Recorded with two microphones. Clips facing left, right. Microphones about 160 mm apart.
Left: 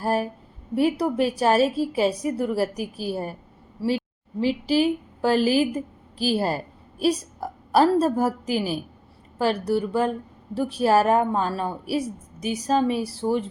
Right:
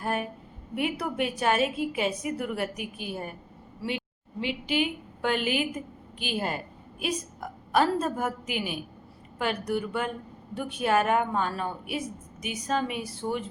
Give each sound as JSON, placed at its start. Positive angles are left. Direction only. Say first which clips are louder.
{"t": 0.0, "sound": "a woman's voice", "louder": "left 6 dB", "side_deg": 35}